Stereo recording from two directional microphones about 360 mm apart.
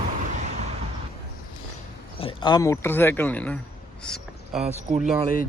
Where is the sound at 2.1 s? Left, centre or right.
Centre.